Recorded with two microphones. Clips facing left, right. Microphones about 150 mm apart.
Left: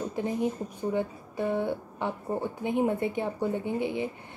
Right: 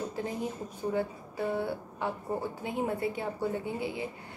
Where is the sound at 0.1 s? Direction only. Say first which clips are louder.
Left 5 dB; 20° left (ahead or behind).